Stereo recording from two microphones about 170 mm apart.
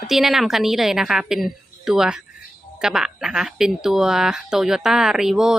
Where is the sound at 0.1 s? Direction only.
Centre (ahead or behind).